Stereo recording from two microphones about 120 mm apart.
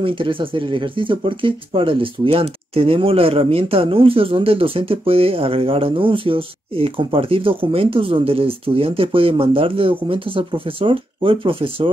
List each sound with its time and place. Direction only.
0.0 s speech: 45° right (ahead or behind)